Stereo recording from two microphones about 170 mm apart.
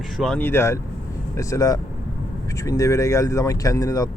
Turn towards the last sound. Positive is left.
turn(degrees=20)  # may be behind; listen again after turning